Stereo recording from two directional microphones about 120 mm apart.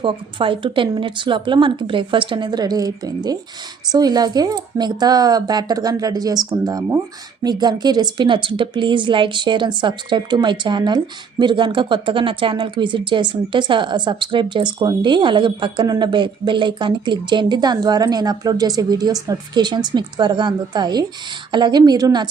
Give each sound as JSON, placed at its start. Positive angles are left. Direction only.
{"t": 0.0, "sound": "a woman's voice", "side_deg": -45}